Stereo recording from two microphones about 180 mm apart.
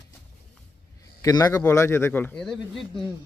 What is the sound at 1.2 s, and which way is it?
A man's voice, 20° left (ahead or behind).